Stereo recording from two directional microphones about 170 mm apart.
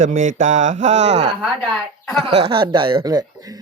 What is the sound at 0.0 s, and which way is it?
Speech, 50° right (ahead or behind).